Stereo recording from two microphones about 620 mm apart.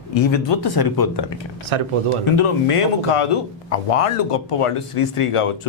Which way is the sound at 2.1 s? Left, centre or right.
Left.